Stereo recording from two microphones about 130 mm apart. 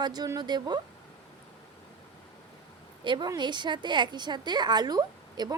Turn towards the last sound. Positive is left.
turn(degrees=-30)  # may be behind; listen again after turning